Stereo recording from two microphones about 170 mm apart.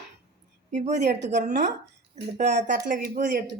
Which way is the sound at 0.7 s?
45° right (ahead or behind).